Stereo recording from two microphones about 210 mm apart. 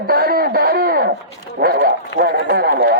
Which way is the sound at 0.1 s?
45° right (ahead or behind).